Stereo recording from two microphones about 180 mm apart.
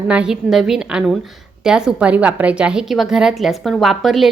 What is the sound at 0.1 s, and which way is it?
Speech, 5° right (ahead or behind).